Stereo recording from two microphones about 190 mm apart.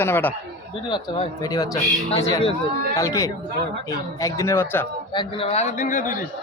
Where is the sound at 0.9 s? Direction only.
20° left (ahead or behind).